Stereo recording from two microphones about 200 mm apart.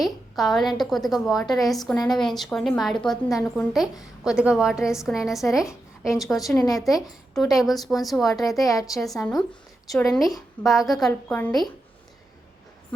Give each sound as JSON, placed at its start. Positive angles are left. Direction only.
{"t": 0.0, "sound": "a woman's voice", "side_deg": 0}
{"t": 1.4, "sound": "a woman's voice", "side_deg": 20}
{"t": 1.6, "sound": "a woman's voice", "side_deg": 0}
{"t": 6.6, "sound": "a woman's voice", "side_deg": 15}
{"t": 7.3, "sound": "a woman's voice", "side_deg": 0}
{"t": 8.5, "sound": "a woman's voice", "side_deg": 15}
{"t": 8.9, "sound": "a woman's voice", "side_deg": 0}